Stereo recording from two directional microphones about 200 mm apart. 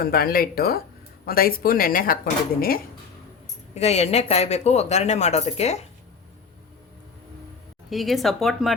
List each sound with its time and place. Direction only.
0.0 s speech: 50° left (ahead or behind)
3.8 s speech: 30° left (ahead or behind)
7.9 s speech: centre (ahead or behind)